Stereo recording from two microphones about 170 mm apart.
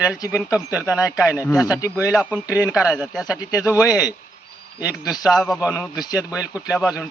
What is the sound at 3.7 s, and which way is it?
Speech, 15° left (ahead or behind).